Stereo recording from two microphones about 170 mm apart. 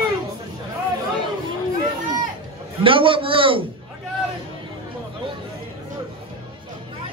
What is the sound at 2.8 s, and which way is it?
Speech, 30° right (ahead or behind).